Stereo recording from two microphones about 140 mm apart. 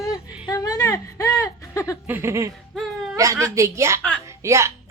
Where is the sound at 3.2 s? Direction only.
20° right (ahead or behind).